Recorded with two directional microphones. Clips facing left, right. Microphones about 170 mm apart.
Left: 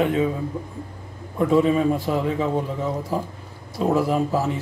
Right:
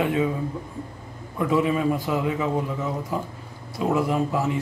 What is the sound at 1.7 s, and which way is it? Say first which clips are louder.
A man's voice: left 3 dB; 25° left (ahead or behind).